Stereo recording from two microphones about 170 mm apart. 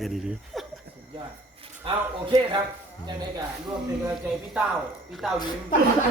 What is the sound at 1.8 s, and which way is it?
Speech, 30° right (ahead or behind).